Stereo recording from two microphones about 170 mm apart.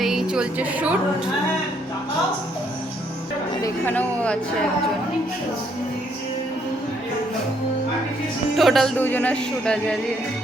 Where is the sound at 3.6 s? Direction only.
10° left (ahead or behind).